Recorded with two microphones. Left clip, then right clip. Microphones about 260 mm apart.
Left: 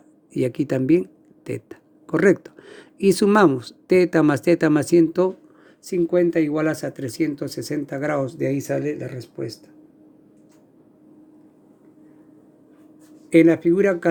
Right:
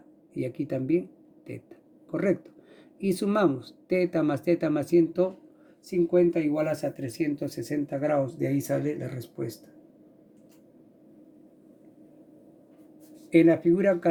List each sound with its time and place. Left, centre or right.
0.3 s speech: left
13.3 s speech: left